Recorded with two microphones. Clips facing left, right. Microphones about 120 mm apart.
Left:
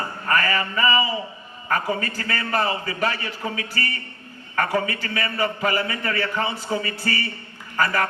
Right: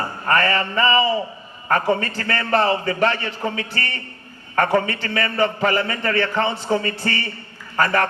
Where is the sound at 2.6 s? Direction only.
50° right (ahead or behind).